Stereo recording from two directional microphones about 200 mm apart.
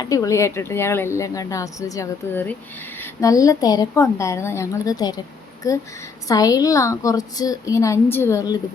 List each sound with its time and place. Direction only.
0.0 s speech: 15° left (ahead or behind)